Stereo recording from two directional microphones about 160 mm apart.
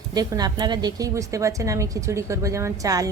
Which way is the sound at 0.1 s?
25° right (ahead or behind).